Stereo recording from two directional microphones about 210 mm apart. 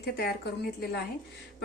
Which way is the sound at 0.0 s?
50° left (ahead or behind).